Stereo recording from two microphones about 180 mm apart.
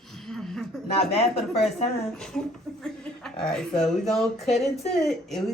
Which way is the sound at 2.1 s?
5° left (ahead or behind).